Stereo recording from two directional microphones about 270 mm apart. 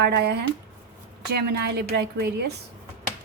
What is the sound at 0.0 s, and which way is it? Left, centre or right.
A woman's voice, right.